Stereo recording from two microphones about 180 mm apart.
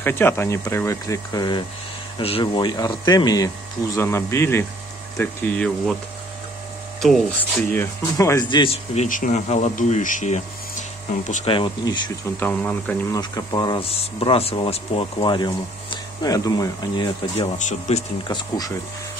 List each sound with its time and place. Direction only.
0.0 s speech: 10° left (ahead or behind)
7.0 s speech: centre (ahead or behind)
7.7 s speech: 15° left (ahead or behind); by 11.4 s 40° left (ahead or behind)
11.4 s speech: 30° left (ahead or behind)
12.4 s speech: 10° left (ahead or behind)
13.2 s speech: 25° left (ahead or behind)
17.6 s speech: 40° left (ahead or behind)